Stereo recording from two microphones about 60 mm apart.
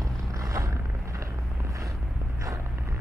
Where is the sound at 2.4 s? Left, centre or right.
Right.